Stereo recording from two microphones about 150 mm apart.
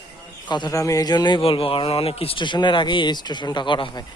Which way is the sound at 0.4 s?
30° left (ahead or behind).